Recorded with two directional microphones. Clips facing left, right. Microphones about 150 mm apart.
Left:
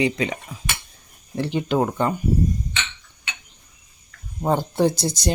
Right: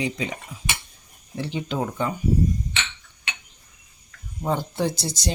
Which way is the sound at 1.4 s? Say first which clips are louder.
Left 6 dB; 60° left (ahead or behind).